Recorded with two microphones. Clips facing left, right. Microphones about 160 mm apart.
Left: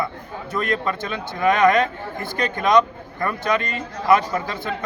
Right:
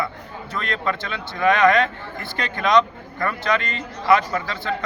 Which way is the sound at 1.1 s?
20° left (ahead or behind).